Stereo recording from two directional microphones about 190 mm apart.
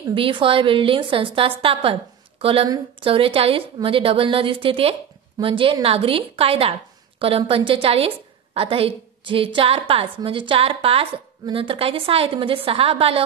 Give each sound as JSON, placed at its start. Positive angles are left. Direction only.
{"t": 0.1, "sound": "a woman's voice", "side_deg": -25}